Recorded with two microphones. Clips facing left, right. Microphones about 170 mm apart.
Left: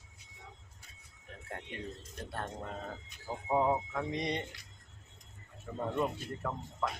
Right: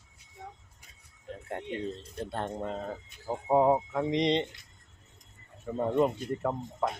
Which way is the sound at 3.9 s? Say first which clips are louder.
Right 8 dB; 20° right (ahead or behind).